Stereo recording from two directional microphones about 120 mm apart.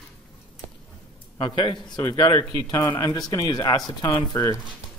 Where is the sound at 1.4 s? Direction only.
40° left (ahead or behind).